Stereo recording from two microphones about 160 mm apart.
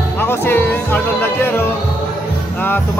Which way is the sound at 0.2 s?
15° left (ahead or behind).